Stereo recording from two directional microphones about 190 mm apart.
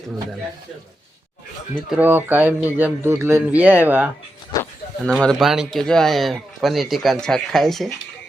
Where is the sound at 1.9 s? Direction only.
10° right (ahead or behind).